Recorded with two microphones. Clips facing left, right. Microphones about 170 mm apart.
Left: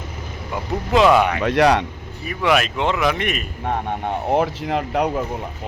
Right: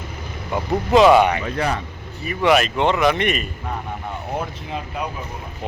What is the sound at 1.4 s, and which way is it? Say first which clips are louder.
Speech: left 7 dB; 85° left.